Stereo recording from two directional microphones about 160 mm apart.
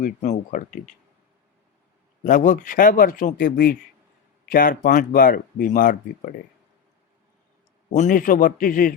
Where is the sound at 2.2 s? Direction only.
55° left (ahead or behind).